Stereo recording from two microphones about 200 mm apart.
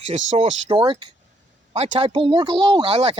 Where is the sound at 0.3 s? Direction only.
35° right (ahead or behind).